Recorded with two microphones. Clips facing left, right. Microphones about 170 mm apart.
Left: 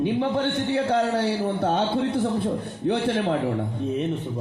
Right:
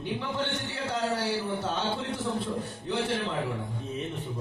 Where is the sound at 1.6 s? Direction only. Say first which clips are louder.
Left 8 dB; 60° left (ahead or behind).